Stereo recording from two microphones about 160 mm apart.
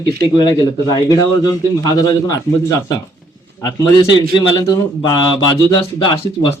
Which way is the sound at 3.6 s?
20° left (ahead or behind).